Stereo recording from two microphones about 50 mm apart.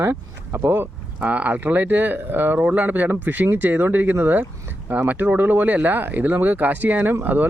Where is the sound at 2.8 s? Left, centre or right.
Right.